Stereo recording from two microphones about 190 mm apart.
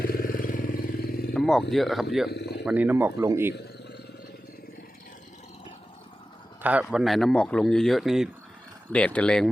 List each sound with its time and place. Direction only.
0.0 s vehicle: 50° left (ahead or behind)
1.3 s a sound: centre (ahead or behind)
1.7 s a man's voice: centre (ahead or behind)
2.3 s a sound: 60° left (ahead or behind)
2.6 s speech: 10° right (ahead or behind)
3.5 s wild animals: 60° left (ahead or behind)
6.6 s a man's voice: 5° right (ahead or behind)